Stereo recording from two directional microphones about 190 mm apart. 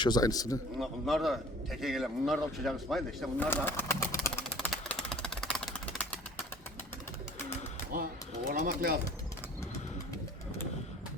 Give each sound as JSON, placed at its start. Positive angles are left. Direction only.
{"t": 0.0, "sound": "a man's voice", "side_deg": 20}
{"t": 0.8, "sound": "a man's voice", "side_deg": 0}
{"t": 3.5, "sound": "a sound", "side_deg": 10}
{"t": 8.5, "sound": "speech", "side_deg": -50}